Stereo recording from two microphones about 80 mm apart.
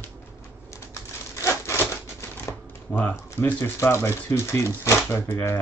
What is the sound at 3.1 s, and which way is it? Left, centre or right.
Speech, left.